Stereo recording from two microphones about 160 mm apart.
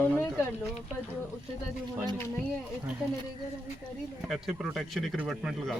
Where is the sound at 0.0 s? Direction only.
10° left (ahead or behind).